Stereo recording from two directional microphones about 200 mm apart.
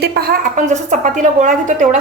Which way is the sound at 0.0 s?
50° right (ahead or behind).